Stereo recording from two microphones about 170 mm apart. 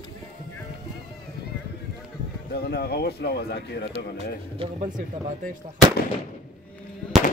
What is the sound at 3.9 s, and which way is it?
Speech, 35° right (ahead or behind).